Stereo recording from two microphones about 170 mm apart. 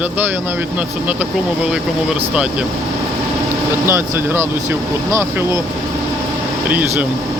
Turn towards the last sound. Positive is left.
turn(degrees=-10)  # may be behind; listen again after turning